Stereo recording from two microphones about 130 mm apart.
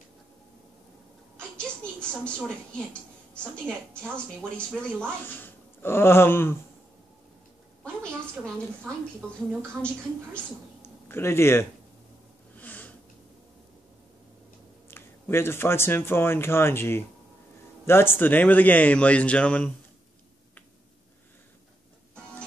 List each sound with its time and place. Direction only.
1.3 s a woman's voice: 10° left (ahead or behind)
9.8 s speech: 10° left (ahead or behind)
10.8 s a sound: 20° left (ahead or behind)
12.5 s snort: 10° left (ahead or behind)
14.9 s speech: 20° left (ahead or behind)